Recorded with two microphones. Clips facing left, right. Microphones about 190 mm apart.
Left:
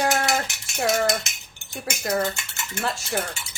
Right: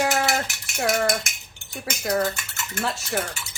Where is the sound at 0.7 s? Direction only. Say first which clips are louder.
Even; centre (ahead or behind).